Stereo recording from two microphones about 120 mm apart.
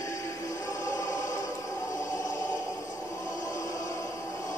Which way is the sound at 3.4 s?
25° left (ahead or behind).